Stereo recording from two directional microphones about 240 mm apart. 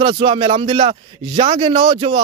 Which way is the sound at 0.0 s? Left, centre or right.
Right.